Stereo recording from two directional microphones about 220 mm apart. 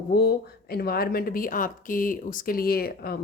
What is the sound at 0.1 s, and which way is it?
Speech, 45° left (ahead or behind).